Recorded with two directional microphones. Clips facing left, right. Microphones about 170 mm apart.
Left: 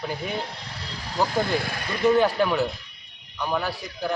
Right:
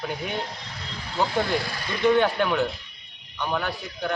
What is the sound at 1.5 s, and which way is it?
Speech, 55° left (ahead or behind).